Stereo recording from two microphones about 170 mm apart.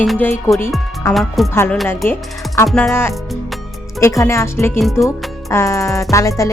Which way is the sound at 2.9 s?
15° left (ahead or behind).